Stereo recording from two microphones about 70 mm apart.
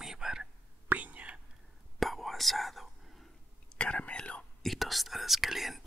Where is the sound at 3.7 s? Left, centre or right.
Centre.